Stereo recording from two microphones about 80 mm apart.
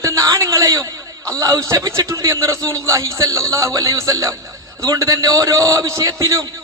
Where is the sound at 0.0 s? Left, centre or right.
Right.